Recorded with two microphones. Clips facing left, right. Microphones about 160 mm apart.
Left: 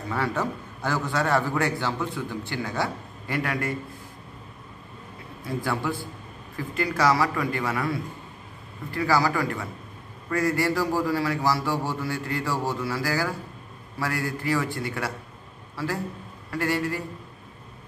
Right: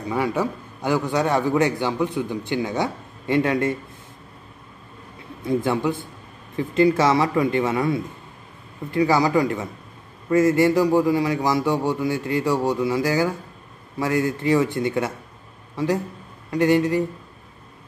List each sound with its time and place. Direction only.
0.1 s a man's voice: 15° right (ahead or behind)
5.4 s a man's voice: 20° right (ahead or behind)